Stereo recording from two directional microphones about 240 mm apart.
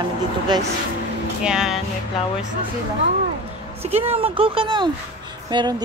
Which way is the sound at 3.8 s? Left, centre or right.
Right.